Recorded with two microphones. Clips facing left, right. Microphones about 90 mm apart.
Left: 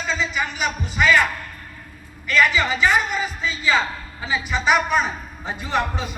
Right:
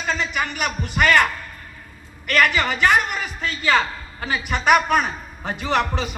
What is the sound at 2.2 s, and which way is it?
A man's voice, 60° right (ahead or behind).